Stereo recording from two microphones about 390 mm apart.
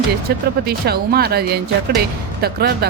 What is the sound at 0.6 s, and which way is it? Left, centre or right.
Speech, right.